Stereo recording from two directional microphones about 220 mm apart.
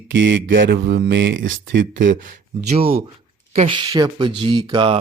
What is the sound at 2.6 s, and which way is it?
Speech, 25° right (ahead or behind).